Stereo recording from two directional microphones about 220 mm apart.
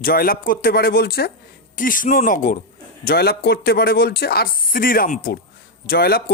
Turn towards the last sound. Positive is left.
turn(degrees=45)  # may be behind; listen again after turning